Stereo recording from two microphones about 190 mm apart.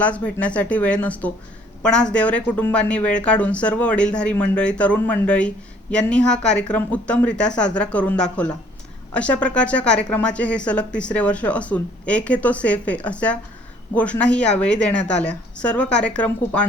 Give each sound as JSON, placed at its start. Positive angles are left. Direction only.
{"t": 0.0, "sound": "a woman's voice", "side_deg": 5}